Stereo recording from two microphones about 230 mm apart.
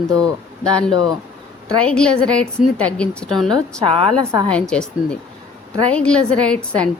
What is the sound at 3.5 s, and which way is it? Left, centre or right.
Speech, right.